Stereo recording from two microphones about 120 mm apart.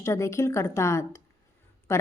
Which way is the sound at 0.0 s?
25° left (ahead or behind).